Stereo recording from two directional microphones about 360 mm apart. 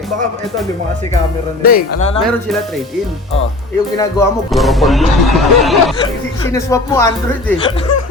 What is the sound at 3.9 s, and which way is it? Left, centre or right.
Speech, centre.